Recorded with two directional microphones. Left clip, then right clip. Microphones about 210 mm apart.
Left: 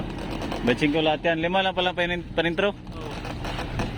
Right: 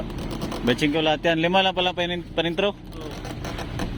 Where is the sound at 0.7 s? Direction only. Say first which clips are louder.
Right 1 dB; 10° right (ahead or behind).